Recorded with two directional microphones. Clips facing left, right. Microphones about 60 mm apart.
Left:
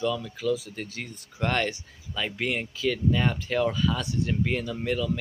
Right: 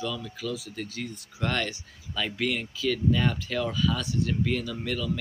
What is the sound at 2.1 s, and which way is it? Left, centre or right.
Speech, centre.